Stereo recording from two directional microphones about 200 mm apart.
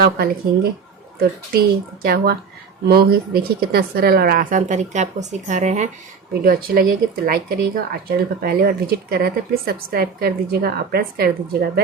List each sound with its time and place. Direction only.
0.0 s speech: 50° right (ahead or behind); by 5.9 s 35° right (ahead or behind)
6.4 s speech: 45° right (ahead or behind)